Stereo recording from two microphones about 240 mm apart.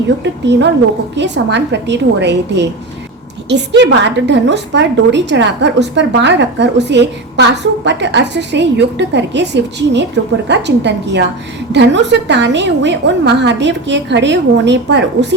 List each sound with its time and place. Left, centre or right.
1.1 s a woman's voice: right